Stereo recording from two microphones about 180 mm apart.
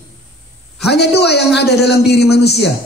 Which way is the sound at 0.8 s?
65° left (ahead or behind).